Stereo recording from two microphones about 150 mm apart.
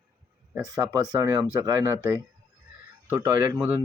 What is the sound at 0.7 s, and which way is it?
Speech, 25° right (ahead or behind).